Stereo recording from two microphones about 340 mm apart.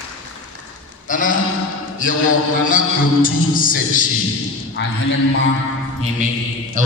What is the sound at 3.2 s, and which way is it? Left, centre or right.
Speech, left.